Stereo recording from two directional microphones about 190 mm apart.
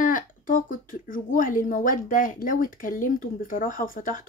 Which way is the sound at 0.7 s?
45° left (ahead or behind).